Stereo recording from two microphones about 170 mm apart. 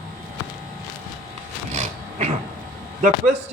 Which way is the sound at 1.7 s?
45° right (ahead or behind).